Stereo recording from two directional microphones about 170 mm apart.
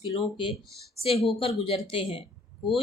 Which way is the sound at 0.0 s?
30° left (ahead or behind).